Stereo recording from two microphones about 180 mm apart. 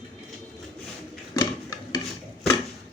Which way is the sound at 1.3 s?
20° left (ahead or behind).